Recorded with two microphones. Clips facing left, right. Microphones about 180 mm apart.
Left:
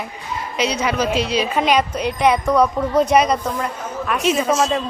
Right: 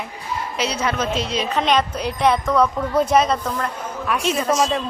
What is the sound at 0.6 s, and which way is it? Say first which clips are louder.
Speech: left 4 dB; 30° right (ahead or behind).